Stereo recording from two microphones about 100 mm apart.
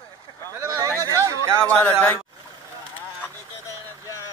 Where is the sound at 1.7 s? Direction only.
10° left (ahead or behind).